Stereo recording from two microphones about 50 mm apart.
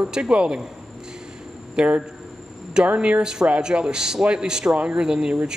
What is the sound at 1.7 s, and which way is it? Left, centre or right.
Speech, right.